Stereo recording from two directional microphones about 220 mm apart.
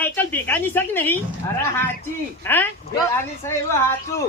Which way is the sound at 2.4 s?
10° left (ahead or behind).